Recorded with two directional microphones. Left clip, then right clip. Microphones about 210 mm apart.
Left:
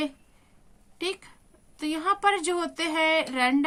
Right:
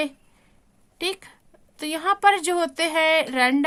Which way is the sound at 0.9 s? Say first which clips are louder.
Right 4 dB; 35° right (ahead or behind).